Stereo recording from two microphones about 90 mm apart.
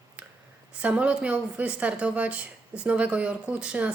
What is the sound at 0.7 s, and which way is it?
A woman's voice, 15° right (ahead or behind).